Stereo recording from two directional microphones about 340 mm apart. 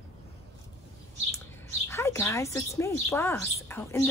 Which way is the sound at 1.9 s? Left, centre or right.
Centre.